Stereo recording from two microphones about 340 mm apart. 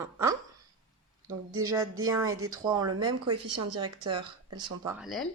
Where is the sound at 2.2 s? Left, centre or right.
Right.